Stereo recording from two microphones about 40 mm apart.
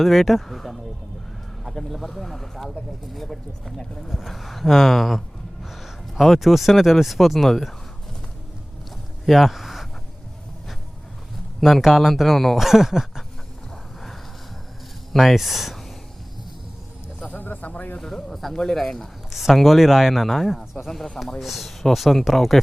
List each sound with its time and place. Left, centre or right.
0.0 s speech: centre
3.8 s speech: centre
4.1 s speech: centre
9.2 s a sound: centre
11.6 s speech: centre
15.1 s speech: centre
17.3 s a sound: left
18.0 s speech: centre
19.3 s speech: centre